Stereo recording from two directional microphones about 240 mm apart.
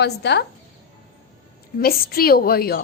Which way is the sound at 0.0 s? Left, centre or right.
Left.